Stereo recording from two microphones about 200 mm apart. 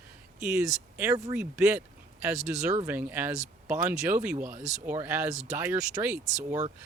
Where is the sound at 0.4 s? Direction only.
15° right (ahead or behind).